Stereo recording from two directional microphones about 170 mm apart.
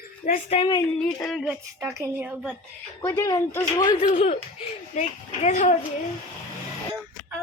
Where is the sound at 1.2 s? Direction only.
Centre (ahead or behind).